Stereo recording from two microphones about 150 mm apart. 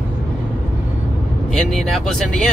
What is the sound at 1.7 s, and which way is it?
Speech, centre (ahead or behind).